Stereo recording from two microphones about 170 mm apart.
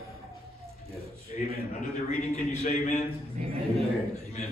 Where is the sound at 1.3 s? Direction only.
45° left (ahead or behind).